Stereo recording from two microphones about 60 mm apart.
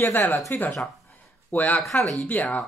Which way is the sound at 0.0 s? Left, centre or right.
Left.